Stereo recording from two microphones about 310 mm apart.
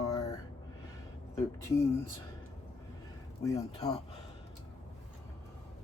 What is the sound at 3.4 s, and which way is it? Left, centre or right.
Speech, centre.